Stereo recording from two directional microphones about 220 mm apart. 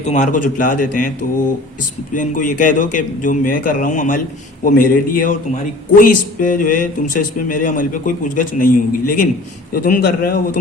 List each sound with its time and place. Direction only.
0.0 s a man's voice: 35° left (ahead or behind)
2.1 s a man's voice: 35° left (ahead or behind)